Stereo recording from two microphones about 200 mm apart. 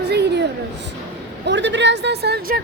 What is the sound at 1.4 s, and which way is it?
A woman's voice, 65° right (ahead or behind).